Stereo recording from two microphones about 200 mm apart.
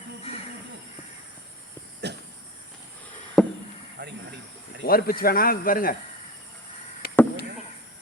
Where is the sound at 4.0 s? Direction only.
60° right (ahead or behind).